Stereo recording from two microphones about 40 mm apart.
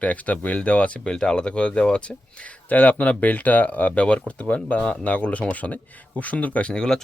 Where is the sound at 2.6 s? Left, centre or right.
Left; by 7.0 s centre.